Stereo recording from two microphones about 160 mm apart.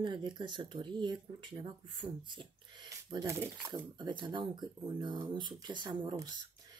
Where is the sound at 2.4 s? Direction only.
30° right (ahead or behind).